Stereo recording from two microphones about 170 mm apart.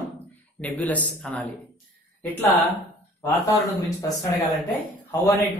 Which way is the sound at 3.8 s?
20° left (ahead or behind).